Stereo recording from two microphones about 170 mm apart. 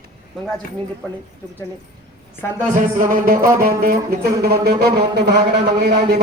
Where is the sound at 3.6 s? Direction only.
60° right (ahead or behind).